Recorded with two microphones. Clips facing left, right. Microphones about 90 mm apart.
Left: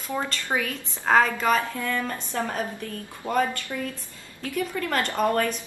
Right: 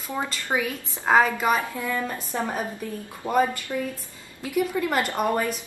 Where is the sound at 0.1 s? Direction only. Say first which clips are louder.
Even; 15° right (ahead or behind).